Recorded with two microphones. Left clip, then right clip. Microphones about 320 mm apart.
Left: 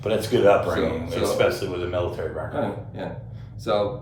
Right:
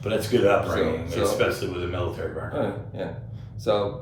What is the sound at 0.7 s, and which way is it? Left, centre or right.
Speech, centre.